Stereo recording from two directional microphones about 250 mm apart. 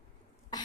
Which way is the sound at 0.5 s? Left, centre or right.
Centre.